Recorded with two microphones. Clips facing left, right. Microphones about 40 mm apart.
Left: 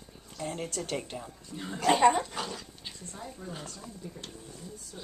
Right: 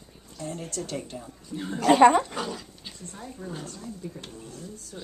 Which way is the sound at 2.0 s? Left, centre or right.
Right.